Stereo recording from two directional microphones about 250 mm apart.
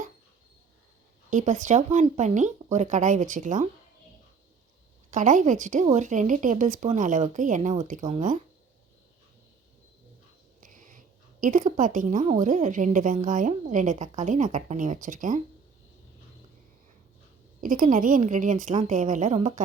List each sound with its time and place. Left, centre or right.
1.3 s a woman's voice: right
5.1 s a woman's voice: right
10.6 s a woman's voice: right
17.6 s a woman's voice: right